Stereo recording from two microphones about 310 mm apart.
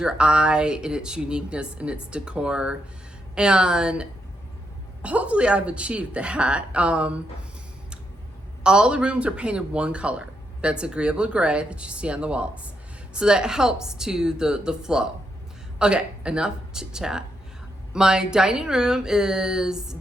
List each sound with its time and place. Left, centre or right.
0.0 s speech: centre
8.6 s speech: centre